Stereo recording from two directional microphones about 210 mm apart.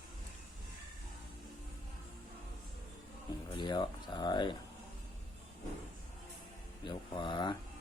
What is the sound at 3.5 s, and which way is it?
Speech, 20° left (ahead or behind).